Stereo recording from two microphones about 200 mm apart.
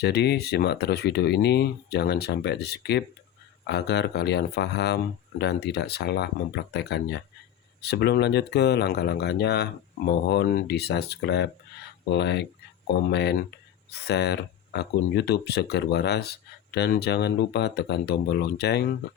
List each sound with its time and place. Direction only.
0.0 s speech: 55° left (ahead or behind)